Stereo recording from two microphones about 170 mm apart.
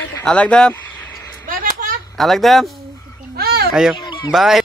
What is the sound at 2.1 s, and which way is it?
Speech, centre (ahead or behind).